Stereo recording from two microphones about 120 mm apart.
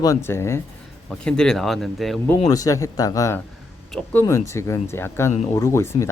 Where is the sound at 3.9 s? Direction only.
10° left (ahead or behind).